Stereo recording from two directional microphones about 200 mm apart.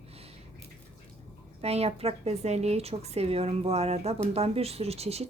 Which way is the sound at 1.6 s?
30° right (ahead or behind).